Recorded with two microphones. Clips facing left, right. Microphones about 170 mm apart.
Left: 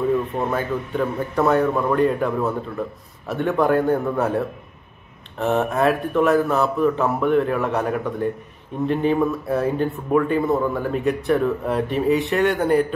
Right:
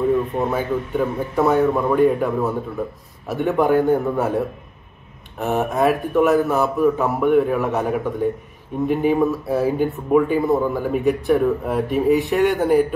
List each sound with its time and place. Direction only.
0.4 s a man's voice: 5° right (ahead or behind)